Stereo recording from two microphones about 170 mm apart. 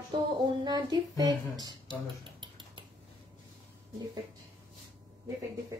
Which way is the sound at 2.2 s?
30° right (ahead or behind).